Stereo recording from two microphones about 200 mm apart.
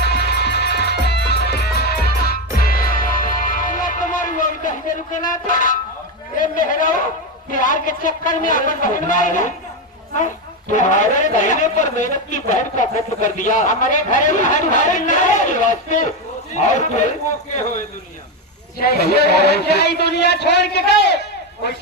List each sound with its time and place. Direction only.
0.0 s music: 55° left (ahead or behind)
6.3 s a man's voice: 40° left (ahead or behind)
10.7 s a man's voice: 40° left (ahead or behind)
18.8 s speech: 50° left (ahead or behind)